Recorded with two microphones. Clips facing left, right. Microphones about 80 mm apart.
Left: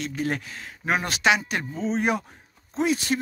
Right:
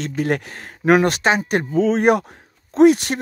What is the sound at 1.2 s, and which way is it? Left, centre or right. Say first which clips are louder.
Speech: right 4 dB; right.